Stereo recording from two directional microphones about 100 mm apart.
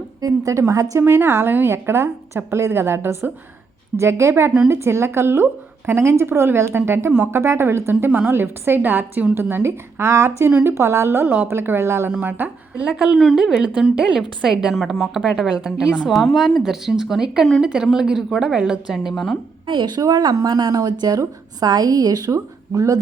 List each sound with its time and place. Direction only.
0.2 s speech: 35° right (ahead or behind); by 12.9 s 20° right (ahead or behind)
12.9 s speech: 5° right (ahead or behind)
19.6 s a woman's voice: 50° right (ahead or behind); by 23.0 s 30° right (ahead or behind)